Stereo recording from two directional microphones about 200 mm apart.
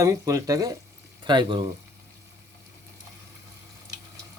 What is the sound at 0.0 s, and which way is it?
Speech, 15° right (ahead or behind).